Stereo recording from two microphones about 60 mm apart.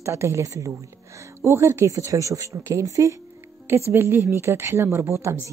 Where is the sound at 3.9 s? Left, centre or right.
Right.